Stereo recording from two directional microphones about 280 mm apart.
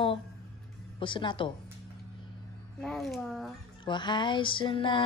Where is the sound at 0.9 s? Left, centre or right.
Centre.